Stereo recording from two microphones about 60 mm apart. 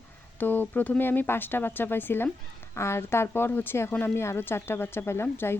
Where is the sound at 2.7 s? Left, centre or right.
Left.